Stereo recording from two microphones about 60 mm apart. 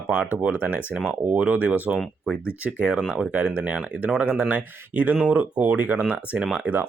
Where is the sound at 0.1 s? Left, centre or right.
Right.